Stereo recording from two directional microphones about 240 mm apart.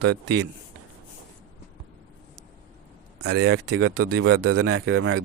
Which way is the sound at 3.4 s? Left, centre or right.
Right.